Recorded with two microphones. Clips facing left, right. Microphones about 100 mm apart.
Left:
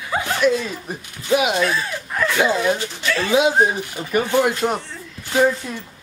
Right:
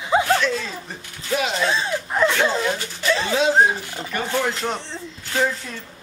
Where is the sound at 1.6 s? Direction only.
25° right (ahead or behind).